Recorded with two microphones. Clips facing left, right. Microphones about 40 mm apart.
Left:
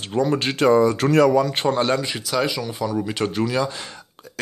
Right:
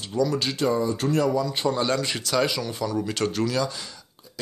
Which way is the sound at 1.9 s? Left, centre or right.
Centre.